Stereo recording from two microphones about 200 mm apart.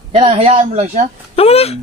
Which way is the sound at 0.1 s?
30° right (ahead or behind).